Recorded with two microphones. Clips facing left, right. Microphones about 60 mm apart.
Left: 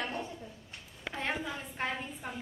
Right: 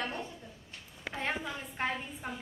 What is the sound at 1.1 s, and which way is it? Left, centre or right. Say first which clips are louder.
A woman's voice: even; centre.